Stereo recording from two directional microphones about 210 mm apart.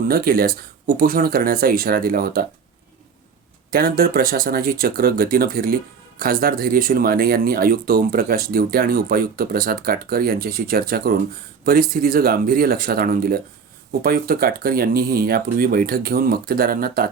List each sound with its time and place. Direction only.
0.1 s speech: 45° right (ahead or behind)
3.7 s speech: 45° right (ahead or behind)